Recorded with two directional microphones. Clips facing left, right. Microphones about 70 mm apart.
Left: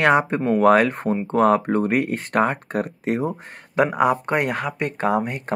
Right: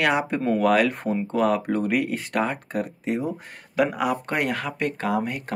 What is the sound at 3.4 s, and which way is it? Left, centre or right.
Speech, left.